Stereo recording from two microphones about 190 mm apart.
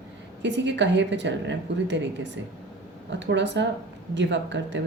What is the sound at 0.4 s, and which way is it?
A woman's voice, 65° right (ahead or behind).